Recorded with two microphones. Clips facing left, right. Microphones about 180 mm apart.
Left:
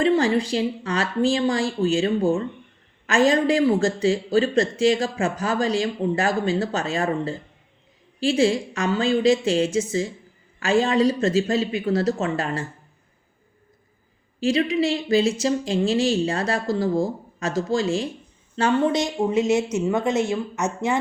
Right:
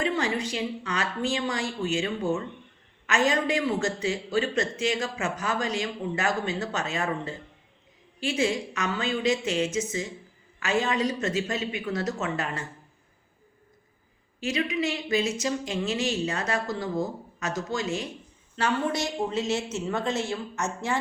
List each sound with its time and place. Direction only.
0.0 s speech: 35° left (ahead or behind)
14.4 s a woman's voice: 30° left (ahead or behind)